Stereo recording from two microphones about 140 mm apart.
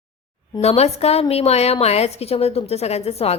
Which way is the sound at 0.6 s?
50° left (ahead or behind).